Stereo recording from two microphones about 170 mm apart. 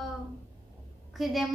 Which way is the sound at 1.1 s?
Centre (ahead or behind).